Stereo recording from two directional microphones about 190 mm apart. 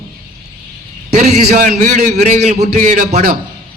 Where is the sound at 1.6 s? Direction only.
40° right (ahead or behind).